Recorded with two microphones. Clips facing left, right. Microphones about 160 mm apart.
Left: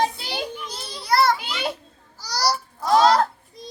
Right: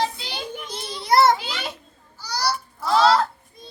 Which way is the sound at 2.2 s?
40° left (ahead or behind).